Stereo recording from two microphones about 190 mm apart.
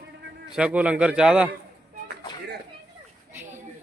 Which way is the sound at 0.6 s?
5° right (ahead or behind).